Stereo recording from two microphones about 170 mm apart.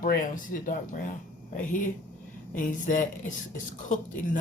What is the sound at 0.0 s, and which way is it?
Speech, 50° left (ahead or behind).